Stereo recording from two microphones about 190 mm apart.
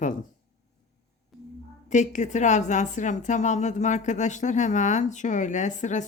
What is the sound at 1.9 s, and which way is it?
A woman's voice, 40° left (ahead or behind).